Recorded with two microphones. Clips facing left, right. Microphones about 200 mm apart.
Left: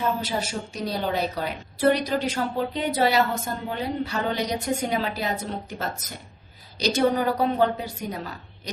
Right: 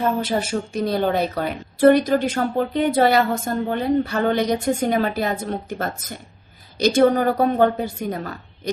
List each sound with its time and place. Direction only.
0.0 s a woman's voice: 55° right (ahead or behind)